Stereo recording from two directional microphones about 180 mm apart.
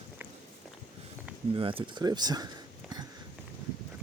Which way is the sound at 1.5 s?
30° right (ahead or behind).